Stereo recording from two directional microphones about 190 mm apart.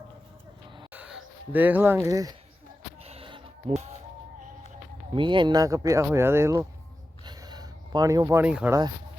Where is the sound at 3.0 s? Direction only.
30° right (ahead or behind).